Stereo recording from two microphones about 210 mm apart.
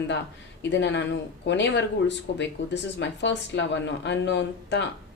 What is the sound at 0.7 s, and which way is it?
A woman's voice, 55° left (ahead or behind).